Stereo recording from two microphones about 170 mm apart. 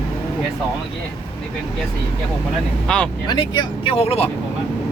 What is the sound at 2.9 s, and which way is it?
Speech, 5° left (ahead or behind).